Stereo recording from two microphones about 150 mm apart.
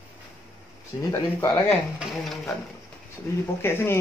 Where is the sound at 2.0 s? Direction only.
Centre (ahead or behind).